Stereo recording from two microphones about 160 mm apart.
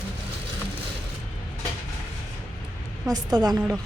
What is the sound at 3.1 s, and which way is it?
Speech, 25° right (ahead or behind).